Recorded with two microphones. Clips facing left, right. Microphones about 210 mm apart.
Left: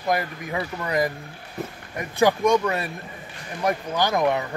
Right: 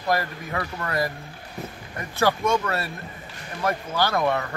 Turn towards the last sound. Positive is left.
turn(degrees=15)  # may be behind; listen again after turning